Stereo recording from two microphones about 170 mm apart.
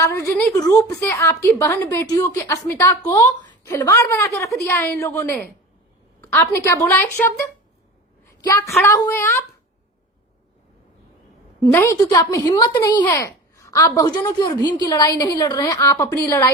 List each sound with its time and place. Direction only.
0.0 s a woman's voice: 20° left (ahead or behind)
11.6 s a woman's voice: 15° left (ahead or behind)